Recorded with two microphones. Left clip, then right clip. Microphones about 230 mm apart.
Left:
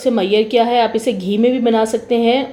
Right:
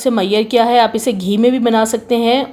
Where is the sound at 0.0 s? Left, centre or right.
Right.